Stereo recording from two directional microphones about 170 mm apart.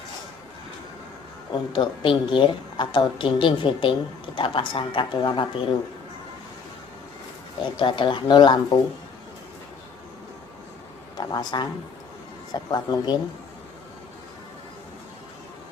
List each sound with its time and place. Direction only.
1.7 s a woman's voice: 30° left (ahead or behind)
7.6 s a woman's voice: 30° left (ahead or behind)
11.2 s a woman's voice: 25° left (ahead or behind)